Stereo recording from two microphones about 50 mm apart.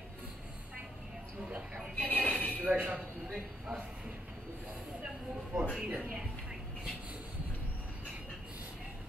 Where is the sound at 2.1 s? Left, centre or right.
Left.